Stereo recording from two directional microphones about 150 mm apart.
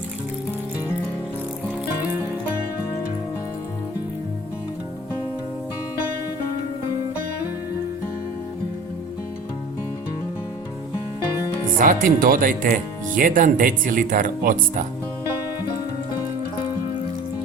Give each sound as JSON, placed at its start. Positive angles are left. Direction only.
{"t": 11.8, "sound": "speech", "side_deg": -60}